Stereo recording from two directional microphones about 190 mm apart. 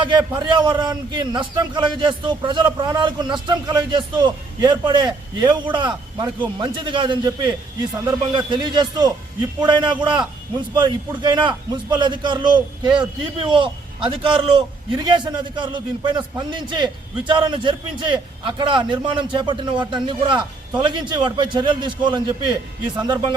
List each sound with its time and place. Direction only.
0.0 s a man's voice: 25° right (ahead or behind)